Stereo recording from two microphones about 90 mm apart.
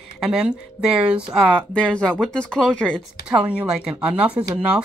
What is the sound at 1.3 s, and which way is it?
Speech, 5° left (ahead or behind).